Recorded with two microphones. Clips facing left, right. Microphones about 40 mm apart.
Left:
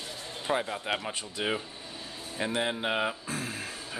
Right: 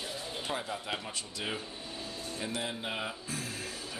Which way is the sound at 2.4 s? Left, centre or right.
Left.